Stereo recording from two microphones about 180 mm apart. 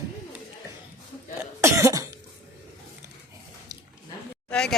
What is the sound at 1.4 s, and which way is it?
Cough, 15° right (ahead or behind).